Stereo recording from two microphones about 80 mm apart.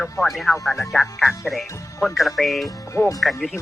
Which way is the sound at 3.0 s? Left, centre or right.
Left.